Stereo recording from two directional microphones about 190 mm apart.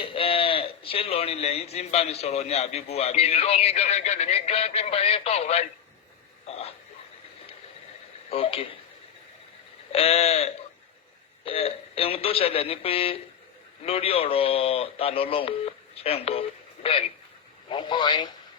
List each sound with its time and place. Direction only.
0.0 s a man's voice: 30° left (ahead or behind)
8.3 s speech: 30° left (ahead or behind)
9.9 s a man's voice: 30° left (ahead or behind)
17.7 s speech: 25° left (ahead or behind)